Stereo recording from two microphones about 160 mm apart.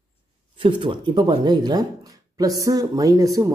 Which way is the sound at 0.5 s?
30° right (ahead or behind).